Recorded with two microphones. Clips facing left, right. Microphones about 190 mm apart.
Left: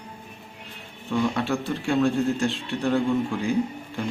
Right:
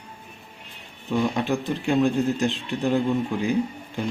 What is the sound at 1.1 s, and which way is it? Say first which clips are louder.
Speech: right 1 dB; 20° right (ahead or behind).